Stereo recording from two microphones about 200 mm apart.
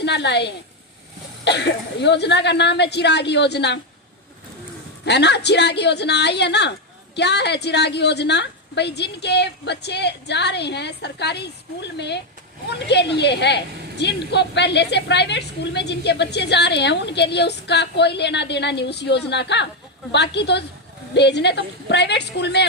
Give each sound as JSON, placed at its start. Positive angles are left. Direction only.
{"t": 0.0, "sound": "a woman's voice", "side_deg": 60}
{"t": 5.0, "sound": "a woman's voice", "side_deg": 55}